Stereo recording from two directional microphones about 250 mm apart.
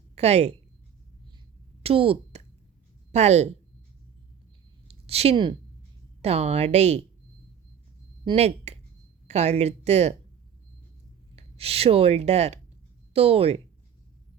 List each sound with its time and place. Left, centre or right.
0.2 s speech: right
1.8 s speech: right
4.9 s a woman's voice: right
8.2 s speech: right
11.3 s speech: right